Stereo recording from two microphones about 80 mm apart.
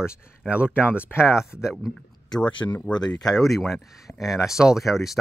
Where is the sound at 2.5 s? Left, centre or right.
Left.